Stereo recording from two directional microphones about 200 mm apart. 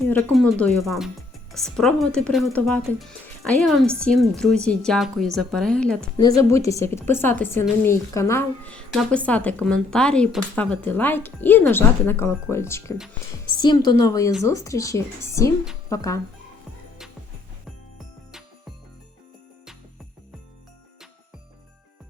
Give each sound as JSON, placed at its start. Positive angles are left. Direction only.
{"t": 0.0, "sound": "a sound", "side_deg": 10}
{"t": 0.6, "sound": "speech", "side_deg": 0}
{"t": 6.1, "sound": "a woman's voice", "side_deg": 20}
{"t": 17.9, "sound": "music", "side_deg": 0}